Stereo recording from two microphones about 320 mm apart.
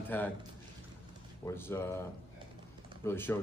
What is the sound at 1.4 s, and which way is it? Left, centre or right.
Speech, centre.